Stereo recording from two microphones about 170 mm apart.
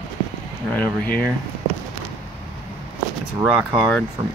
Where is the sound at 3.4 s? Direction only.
5° right (ahead or behind).